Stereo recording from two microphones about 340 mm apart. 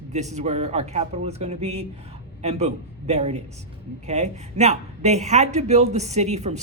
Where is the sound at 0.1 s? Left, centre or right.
Centre.